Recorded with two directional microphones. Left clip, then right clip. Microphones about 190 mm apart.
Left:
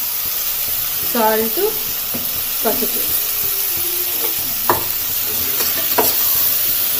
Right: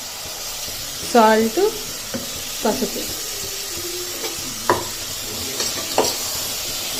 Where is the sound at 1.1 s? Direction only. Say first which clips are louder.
Right 3 dB; 35° right (ahead or behind).